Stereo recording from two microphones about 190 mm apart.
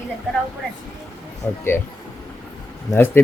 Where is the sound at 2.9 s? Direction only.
10° left (ahead or behind).